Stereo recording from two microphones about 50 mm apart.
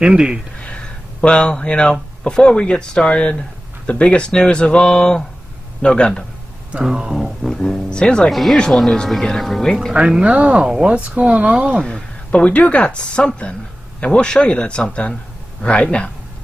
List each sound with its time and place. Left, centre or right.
0.0 s speech: centre
1.2 s speech: left
6.7 s speech: centre
7.9 s speech: centre
8.3 s speech: centre
9.9 s speech: centre
10.2 s speech: right
10.6 s speech: centre
11.0 s speech: right
11.8 s speech: centre